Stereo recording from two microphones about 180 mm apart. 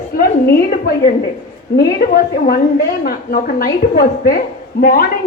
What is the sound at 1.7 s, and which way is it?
A woman's voice, 55° left (ahead or behind).